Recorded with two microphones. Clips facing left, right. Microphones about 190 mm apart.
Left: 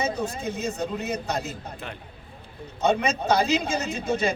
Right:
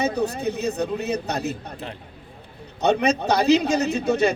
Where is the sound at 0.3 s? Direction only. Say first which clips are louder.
Right 4 dB; 65° right (ahead or behind).